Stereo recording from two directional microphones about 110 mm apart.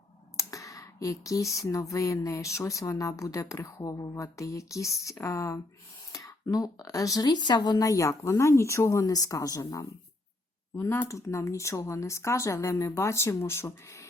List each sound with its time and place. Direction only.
0.3 s clicking: 30° left (ahead or behind)
1.5 s speech: 30° left (ahead or behind)
10.8 s speech: 20° left (ahead or behind)